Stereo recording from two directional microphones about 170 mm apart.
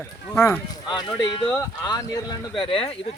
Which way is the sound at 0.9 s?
25° left (ahead or behind).